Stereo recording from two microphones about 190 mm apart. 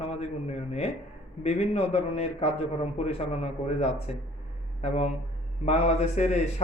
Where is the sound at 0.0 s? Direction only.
30° left (ahead or behind).